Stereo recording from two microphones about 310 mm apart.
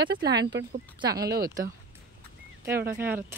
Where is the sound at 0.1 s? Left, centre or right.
Right.